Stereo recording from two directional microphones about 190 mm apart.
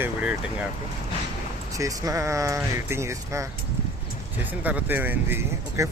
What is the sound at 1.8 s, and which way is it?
Speech, 15° right (ahead or behind).